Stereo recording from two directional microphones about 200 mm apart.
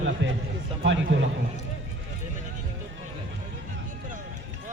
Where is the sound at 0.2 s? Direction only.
70° right (ahead or behind).